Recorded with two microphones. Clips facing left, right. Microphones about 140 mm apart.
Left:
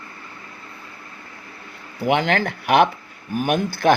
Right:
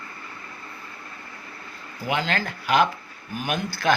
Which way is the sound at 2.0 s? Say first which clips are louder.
Left 7 dB; 65° left (ahead or behind).